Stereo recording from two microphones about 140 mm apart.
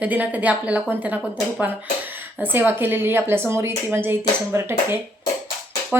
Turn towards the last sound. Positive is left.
turn(degrees=-10)  # may be behind; listen again after turning